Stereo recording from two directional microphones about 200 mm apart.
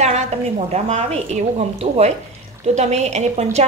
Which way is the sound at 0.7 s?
35° right (ahead or behind).